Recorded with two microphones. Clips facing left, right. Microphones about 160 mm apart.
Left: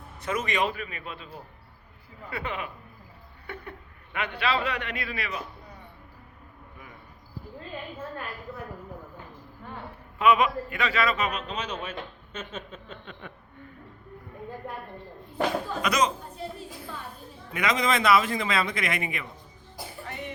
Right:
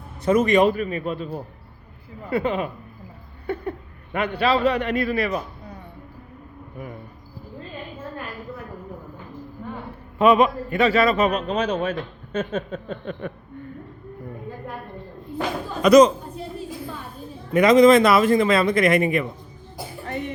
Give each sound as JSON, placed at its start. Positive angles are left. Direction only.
{"t": 0.3, "sound": "a man's voice", "side_deg": -40}
{"t": 3.4, "sound": "a sound", "side_deg": -35}
{"t": 4.4, "sound": "a man's voice", "side_deg": -40}
{"t": 10.2, "sound": "a man's voice", "side_deg": -35}
{"t": 15.8, "sound": "a man's voice", "side_deg": -40}
{"t": 17.5, "sound": "speech", "side_deg": -40}